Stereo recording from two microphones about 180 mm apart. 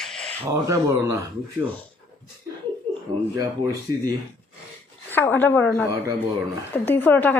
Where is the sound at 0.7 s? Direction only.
15° right (ahead or behind).